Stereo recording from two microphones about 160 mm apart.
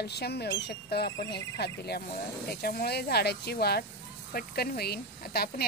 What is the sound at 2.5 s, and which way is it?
A woman's voice, 75° left (ahead or behind).